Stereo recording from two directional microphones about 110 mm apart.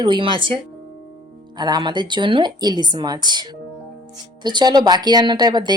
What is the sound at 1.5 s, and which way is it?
Speech, 40° right (ahead or behind).